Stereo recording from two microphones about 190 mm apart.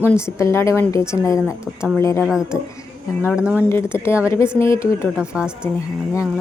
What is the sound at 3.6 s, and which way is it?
Speech, 15° left (ahead or behind).